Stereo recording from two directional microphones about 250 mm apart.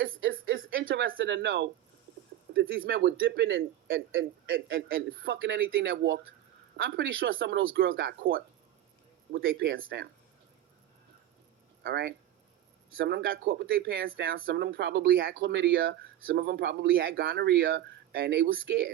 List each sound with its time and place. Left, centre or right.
0.3 s a sound: right
2.5 s speech: right
11.8 s speech: right